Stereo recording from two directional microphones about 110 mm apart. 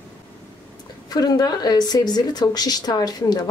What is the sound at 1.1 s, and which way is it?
Speech, 35° left (ahead or behind).